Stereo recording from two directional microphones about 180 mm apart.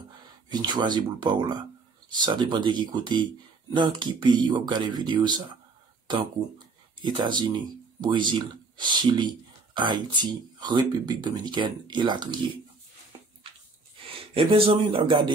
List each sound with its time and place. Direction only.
0.5 s speech: 25° right (ahead or behind)
7.0 s speech: 25° right (ahead or behind)
13.9 s speech: 30° right (ahead or behind)